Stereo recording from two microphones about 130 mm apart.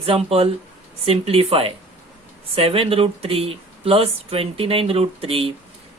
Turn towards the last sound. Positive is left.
turn(degrees=-45)  # may be behind; listen again after turning